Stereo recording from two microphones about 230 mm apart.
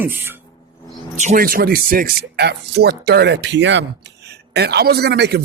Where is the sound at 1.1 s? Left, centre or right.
Right.